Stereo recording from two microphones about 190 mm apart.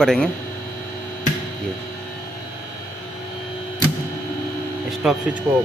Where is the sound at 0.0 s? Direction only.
5° left (ahead or behind).